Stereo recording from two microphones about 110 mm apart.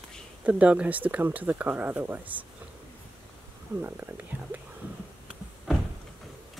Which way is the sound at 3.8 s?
20° right (ahead or behind).